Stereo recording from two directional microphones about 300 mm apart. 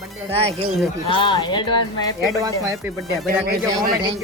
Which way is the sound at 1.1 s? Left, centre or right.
Centre.